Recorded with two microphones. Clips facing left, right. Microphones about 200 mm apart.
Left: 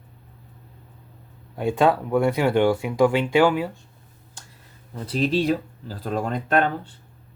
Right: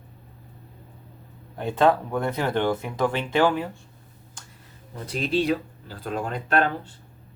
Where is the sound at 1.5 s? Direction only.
15° left (ahead or behind).